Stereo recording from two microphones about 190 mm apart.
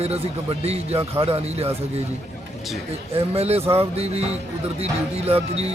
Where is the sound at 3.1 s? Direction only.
35° right (ahead or behind).